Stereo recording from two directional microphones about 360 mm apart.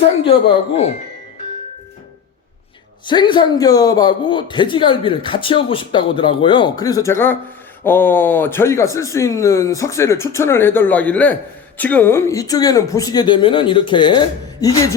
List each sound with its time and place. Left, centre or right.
0.3 s speech: centre
3.1 s speech: centre